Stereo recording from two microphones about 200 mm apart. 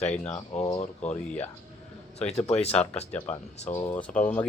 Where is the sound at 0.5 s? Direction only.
30° left (ahead or behind).